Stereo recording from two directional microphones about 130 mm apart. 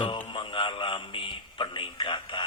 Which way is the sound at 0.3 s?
40° left (ahead or behind).